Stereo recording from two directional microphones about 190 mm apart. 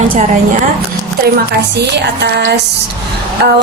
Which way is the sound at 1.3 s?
60° right (ahead or behind).